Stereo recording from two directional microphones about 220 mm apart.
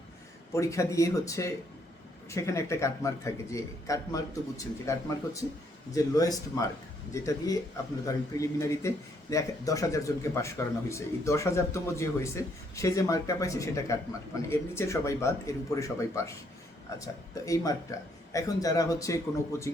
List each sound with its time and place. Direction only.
0.5 s a man's voice: 15° left (ahead or behind)